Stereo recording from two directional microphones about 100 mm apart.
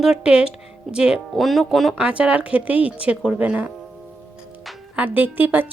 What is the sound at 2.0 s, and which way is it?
Speech, 10° right (ahead or behind).